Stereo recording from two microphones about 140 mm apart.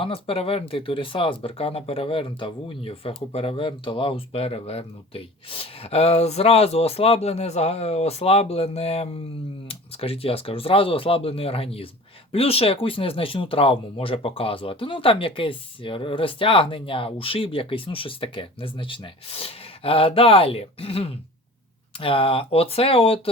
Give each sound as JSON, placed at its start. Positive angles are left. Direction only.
{"t": 0.0, "sound": "speech", "side_deg": 40}